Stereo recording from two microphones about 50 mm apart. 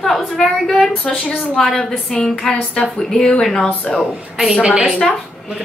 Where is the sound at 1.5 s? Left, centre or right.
Left.